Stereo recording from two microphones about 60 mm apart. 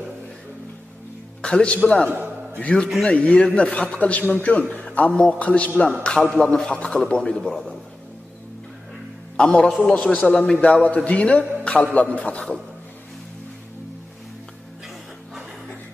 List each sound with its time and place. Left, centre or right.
1.4 s a man's voice: centre
2.0 s a sound: right
2.6 s a man's voice: centre
9.4 s a man's voice: centre
10.7 s a man's voice: left